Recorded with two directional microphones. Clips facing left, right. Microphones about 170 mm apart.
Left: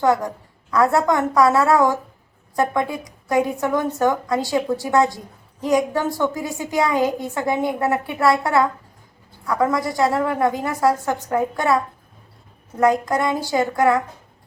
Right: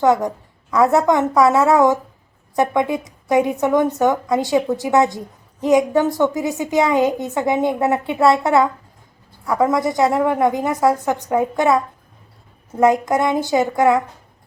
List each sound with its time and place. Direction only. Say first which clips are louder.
0.0 s a woman's voice: right 3 dB; 20° right (ahead or behind)